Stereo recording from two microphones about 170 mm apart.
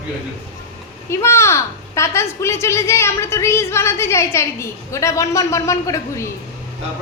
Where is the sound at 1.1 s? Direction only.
15° left (ahead or behind).